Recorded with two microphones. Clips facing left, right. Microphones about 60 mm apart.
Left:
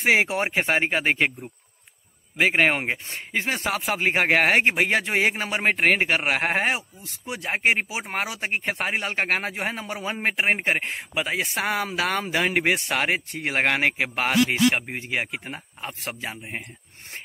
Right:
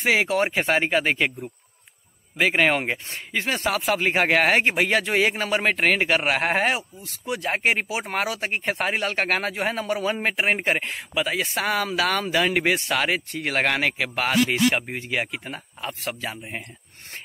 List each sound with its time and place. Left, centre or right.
0.0 s speech: left
2.3 s speech: centre
8.9 s speech: centre